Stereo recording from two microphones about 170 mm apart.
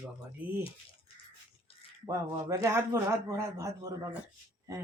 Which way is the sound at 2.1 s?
20° right (ahead or behind).